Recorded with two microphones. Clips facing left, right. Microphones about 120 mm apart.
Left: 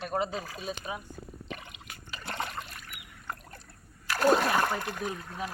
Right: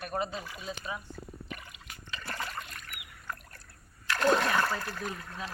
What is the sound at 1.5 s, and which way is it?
Drip, 25° left (ahead or behind).